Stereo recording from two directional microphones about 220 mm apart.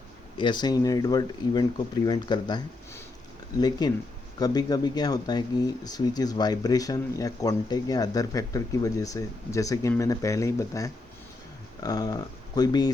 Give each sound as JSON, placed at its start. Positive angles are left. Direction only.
{"t": 0.3, "sound": "speech", "side_deg": 20}